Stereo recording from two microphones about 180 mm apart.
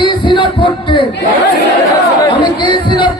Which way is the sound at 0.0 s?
25° left (ahead or behind).